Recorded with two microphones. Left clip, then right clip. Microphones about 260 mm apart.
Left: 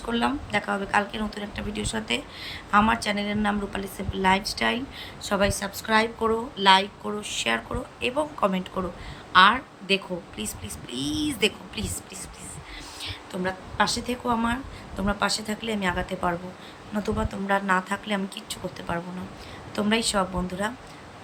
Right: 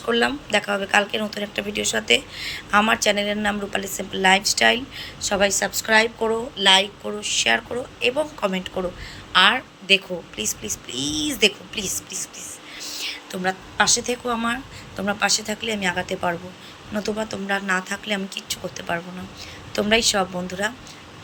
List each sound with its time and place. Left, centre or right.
0.1 s a woman's voice: centre
13.0 s a woman's voice: centre